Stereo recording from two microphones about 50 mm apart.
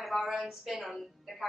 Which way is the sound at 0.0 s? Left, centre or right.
Centre.